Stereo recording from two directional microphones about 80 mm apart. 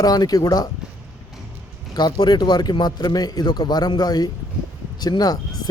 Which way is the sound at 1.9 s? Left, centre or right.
Left.